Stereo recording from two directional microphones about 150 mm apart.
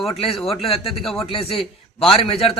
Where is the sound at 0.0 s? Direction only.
40° left (ahead or behind).